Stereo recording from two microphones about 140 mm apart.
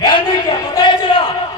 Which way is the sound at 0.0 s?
30° left (ahead or behind).